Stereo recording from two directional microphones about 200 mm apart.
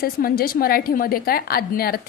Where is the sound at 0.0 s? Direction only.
50° left (ahead or behind).